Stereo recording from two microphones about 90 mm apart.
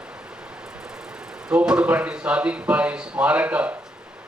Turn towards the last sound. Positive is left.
turn(degrees=-15)  # may be behind; listen again after turning